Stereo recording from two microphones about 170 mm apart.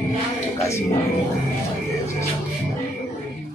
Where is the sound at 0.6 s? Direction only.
15° left (ahead or behind).